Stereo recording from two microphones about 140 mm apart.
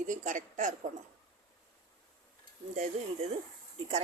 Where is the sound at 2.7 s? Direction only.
60° right (ahead or behind).